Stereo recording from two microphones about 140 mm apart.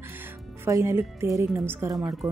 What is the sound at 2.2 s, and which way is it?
Speech, centre (ahead or behind).